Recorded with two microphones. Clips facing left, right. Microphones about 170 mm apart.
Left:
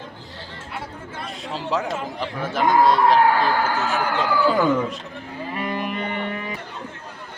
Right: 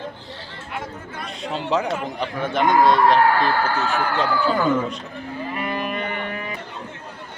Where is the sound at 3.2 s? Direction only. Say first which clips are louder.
Even; 15° left (ahead or behind).